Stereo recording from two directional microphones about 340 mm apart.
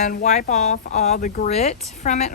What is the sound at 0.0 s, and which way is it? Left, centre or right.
Speech, left.